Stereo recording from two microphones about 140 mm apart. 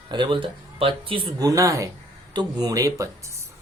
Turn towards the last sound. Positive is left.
turn(degrees=-25)  # may be behind; listen again after turning